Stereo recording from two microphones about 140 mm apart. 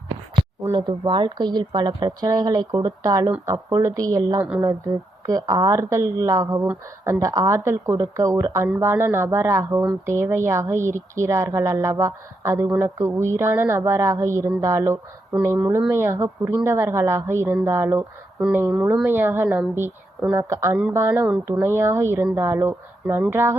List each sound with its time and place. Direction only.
0.8 s a woman's voice: 35° right (ahead or behind); by 18.0 s 20° right (ahead or behind)
18.3 s a woman's voice: 5° right (ahead or behind)